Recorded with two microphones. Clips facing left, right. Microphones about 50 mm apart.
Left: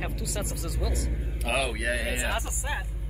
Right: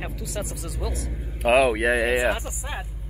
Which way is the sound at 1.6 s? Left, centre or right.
Right.